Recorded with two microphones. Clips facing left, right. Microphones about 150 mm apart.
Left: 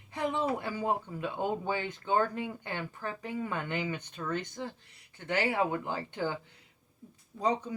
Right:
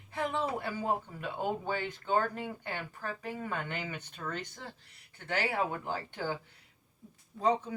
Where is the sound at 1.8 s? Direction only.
20° left (ahead or behind).